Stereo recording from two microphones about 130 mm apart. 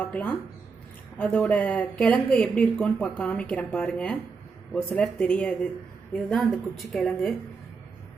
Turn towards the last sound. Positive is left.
turn(degrees=0)  # may be behind; listen again after turning